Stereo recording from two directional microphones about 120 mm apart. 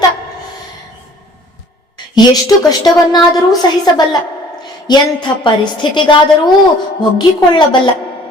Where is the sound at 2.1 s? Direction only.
35° left (ahead or behind).